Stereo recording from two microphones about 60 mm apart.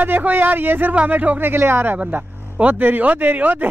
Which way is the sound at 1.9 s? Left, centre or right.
Right.